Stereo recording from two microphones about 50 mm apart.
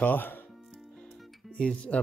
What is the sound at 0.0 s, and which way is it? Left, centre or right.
Speech, left.